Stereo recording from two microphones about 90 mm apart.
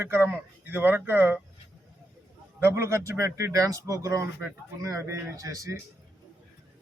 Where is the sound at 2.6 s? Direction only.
30° right (ahead or behind).